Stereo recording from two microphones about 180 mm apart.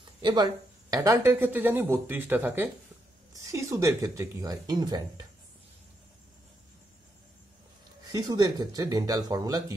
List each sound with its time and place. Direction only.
0.2 s speech: 25° right (ahead or behind)
8.1 s speech: 20° right (ahead or behind)